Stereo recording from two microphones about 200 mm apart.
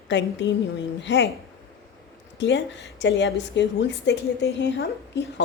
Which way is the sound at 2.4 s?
65° left (ahead or behind).